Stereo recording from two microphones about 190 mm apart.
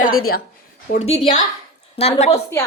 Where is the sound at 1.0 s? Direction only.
35° left (ahead or behind).